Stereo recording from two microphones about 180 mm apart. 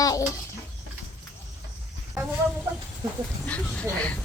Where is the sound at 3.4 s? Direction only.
5° left (ahead or behind).